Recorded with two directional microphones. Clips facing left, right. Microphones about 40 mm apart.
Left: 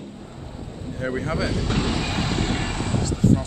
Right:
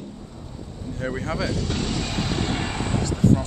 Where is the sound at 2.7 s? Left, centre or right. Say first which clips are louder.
Even; centre.